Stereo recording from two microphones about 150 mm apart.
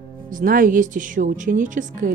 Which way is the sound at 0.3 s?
65° right (ahead or behind).